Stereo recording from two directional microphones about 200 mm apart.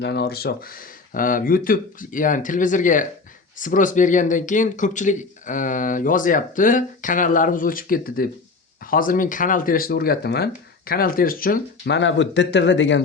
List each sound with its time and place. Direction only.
0.0 s speech: 55° left (ahead or behind)
11.9 s a man's voice: 65° left (ahead or behind)